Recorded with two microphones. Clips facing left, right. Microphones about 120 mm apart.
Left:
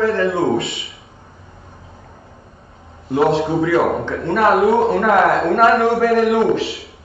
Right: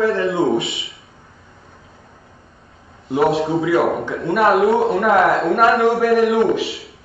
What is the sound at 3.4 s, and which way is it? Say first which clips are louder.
A man's voice: left 1 dB; centre (ahead or behind).